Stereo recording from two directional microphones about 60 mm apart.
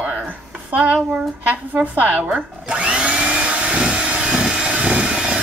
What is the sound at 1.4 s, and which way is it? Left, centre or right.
Blender, right.